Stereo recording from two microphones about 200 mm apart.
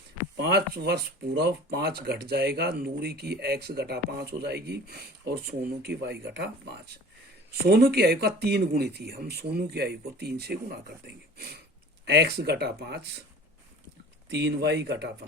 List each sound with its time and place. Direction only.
0.5 s speech: 55° right (ahead or behind)
14.3 s speech: 55° right (ahead or behind)